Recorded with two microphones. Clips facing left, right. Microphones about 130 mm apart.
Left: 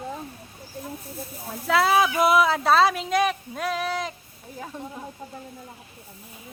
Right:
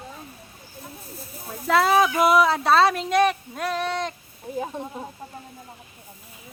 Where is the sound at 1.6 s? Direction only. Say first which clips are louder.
Right 1 dB; centre (ahead or behind).